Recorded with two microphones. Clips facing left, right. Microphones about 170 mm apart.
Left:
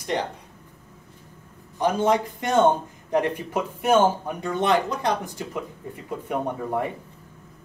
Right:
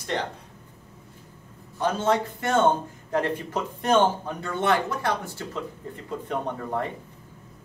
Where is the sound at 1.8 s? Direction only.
15° left (ahead or behind).